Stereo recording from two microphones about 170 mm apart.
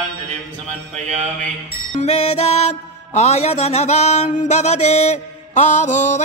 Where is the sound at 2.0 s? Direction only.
40° left (ahead or behind).